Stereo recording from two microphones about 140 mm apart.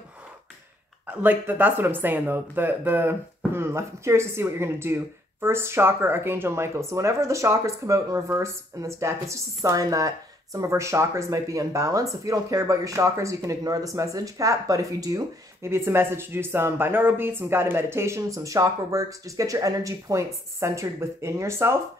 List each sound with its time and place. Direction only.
1.0 s speech: 10° right (ahead or behind)